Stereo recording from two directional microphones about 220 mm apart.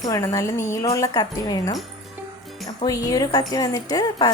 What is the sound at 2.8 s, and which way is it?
A woman's voice, 15° left (ahead or behind).